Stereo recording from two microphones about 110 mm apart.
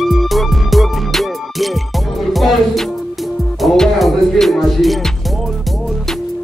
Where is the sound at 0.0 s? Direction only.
Centre (ahead or behind).